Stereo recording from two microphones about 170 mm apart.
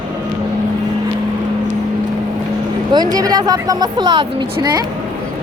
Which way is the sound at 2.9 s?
25° right (ahead or behind).